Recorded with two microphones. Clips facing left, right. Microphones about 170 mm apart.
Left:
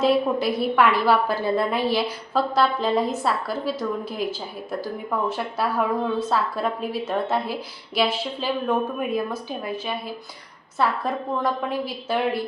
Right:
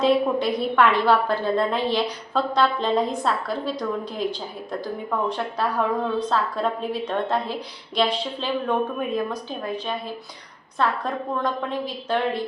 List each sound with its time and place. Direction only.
0.0 s a woman's voice: 5° left (ahead or behind)